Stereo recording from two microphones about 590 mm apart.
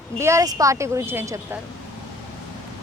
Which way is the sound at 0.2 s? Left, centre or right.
Centre.